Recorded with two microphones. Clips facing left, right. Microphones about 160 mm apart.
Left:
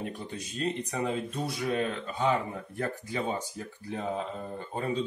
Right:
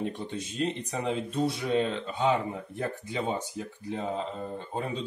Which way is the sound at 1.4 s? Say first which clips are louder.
Right 5 dB; 25° right (ahead or behind).